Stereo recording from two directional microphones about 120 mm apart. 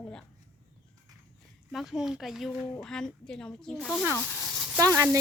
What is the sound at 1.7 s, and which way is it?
A child's voice, 5° right (ahead or behind).